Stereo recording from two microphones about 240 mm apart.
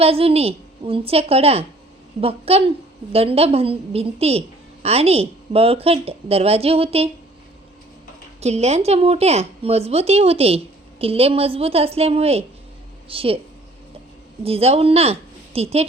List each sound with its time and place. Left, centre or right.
0.0 s a woman's voice: right
8.4 s a woman's voice: right
14.4 s a woman's voice: right